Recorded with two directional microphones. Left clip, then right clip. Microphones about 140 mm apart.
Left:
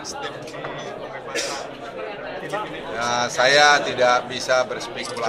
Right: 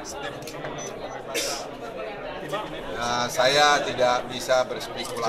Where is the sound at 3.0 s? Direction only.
10° left (ahead or behind).